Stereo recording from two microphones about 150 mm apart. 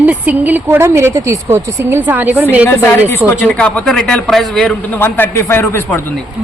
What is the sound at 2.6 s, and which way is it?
A man's voice, 15° left (ahead or behind).